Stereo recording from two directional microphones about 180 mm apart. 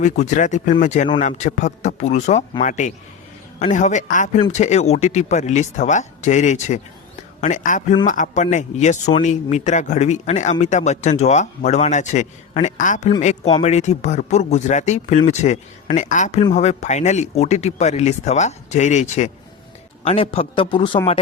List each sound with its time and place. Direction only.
0.0 s a man's voice: 40° left (ahead or behind); by 21.0 s 25° left (ahead or behind)